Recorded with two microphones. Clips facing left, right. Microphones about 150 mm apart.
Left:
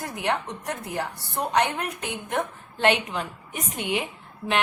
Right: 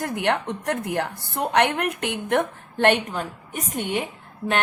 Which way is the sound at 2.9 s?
45° right (ahead or behind).